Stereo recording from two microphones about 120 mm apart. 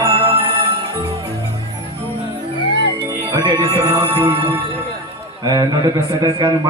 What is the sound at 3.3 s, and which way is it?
Music, 35° right (ahead or behind).